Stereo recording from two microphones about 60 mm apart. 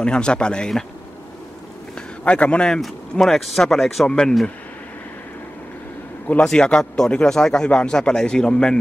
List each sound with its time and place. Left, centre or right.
0.0 s speech: centre
2.0 s a sound: centre
2.7 s speech: centre
6.4 s speech: centre